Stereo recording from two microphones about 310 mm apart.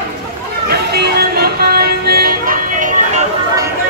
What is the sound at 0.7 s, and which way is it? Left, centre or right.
Music, right.